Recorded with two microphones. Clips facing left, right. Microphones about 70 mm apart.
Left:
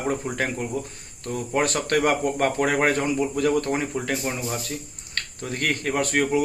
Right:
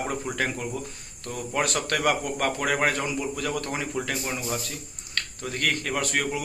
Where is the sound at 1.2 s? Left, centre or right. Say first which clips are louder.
Left 4 dB; left.